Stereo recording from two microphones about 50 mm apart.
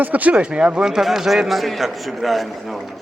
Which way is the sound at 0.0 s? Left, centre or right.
Right.